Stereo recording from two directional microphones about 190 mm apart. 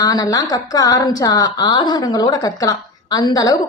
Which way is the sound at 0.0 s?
20° left (ahead or behind).